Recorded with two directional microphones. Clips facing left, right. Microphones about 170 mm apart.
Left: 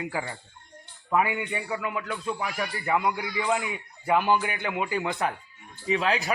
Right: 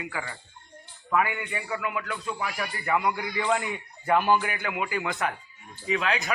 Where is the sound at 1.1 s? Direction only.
20° left (ahead or behind).